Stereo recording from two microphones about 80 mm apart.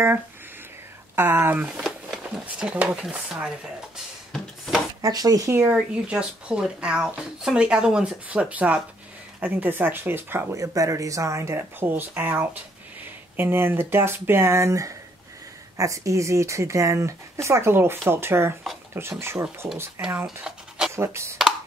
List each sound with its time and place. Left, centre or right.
1.1 s speech: right
1.8 s a sound: centre
2.4 s speech: centre
4.3 s a sound: centre
5.0 s speech: right
5.7 s speech: centre
10.5 s speech: right
20.2 s pant: centre
20.9 s speech: right